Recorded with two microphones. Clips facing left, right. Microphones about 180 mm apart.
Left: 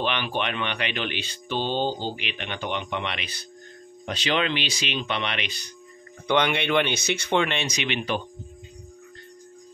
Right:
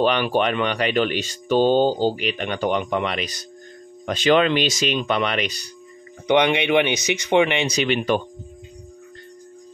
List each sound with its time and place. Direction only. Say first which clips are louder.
0.0 s speech: right 8 dB; 40° right (ahead or behind)
6.2 s speech: right 5 dB; 15° right (ahead or behind)
7.6 s speech: right 7 dB; 35° right (ahead or behind)